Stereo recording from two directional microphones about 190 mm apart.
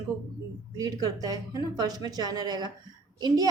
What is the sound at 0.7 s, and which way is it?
A woman's voice, 20° right (ahead or behind).